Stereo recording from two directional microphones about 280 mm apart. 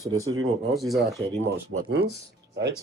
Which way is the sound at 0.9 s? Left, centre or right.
Centre.